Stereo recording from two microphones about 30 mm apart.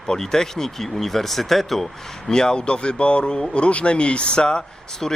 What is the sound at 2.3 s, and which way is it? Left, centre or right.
Speech, left.